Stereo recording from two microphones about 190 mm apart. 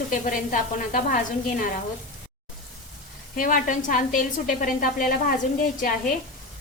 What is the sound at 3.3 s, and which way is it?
A woman's voice, 45° left (ahead or behind).